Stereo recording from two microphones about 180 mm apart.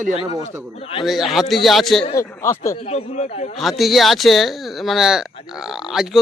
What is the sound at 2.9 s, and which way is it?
Speech, 35° left (ahead or behind).